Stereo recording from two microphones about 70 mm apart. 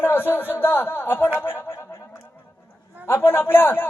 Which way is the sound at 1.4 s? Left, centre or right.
Left.